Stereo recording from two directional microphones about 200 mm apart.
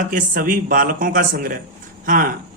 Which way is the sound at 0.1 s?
40° right (ahead or behind).